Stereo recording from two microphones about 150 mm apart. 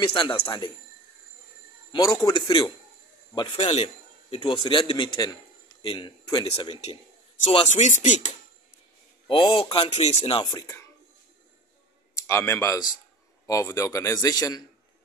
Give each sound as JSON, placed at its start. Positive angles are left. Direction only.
{"t": 0.0, "sound": "a man's voice", "side_deg": 35}
{"t": 1.9, "sound": "a man's voice", "side_deg": 25}
{"t": 7.5, "sound": "speech", "side_deg": 50}
{"t": 9.3, "sound": "a man's voice", "side_deg": 35}
{"t": 12.2, "sound": "speech", "side_deg": 20}